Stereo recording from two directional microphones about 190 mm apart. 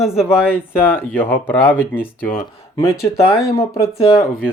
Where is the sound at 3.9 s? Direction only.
30° left (ahead or behind).